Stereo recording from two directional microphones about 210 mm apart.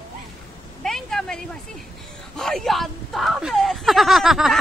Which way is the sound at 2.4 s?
Centre (ahead or behind).